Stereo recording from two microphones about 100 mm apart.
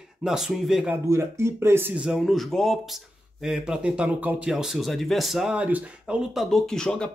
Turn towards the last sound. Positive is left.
turn(degrees=5)  # may be behind; listen again after turning